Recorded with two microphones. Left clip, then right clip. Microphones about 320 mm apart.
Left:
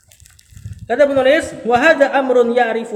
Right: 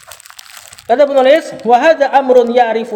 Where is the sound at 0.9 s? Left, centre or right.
Right.